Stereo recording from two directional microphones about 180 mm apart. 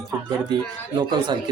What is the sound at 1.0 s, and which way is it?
Speech, 25° right (ahead or behind).